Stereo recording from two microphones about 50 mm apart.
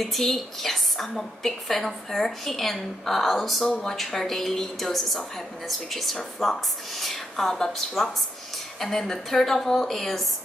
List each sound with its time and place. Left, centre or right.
0.0 s a woman's voice: centre
3.6 s speech: centre
3.9 s a woman's voice: centre